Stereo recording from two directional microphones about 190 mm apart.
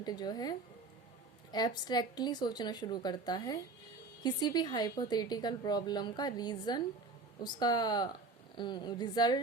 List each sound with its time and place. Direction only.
0.0 s a woman's voice: 20° left (ahead or behind)